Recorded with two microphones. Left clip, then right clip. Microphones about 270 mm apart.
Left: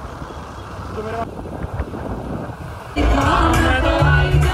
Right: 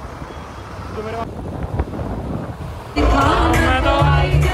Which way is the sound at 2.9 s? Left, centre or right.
Centre.